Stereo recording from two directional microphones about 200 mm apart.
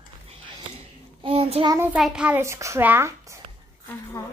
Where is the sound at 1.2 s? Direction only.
30° right (ahead or behind).